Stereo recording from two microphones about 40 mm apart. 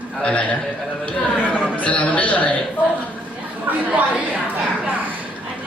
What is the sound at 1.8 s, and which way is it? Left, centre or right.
Speech, left.